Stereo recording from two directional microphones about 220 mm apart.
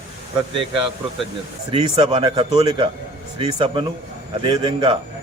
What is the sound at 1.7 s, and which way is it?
Speech, 25° right (ahead or behind).